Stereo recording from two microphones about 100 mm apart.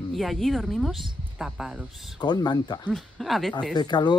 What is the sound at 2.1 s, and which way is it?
Speech, 45° left (ahead or behind).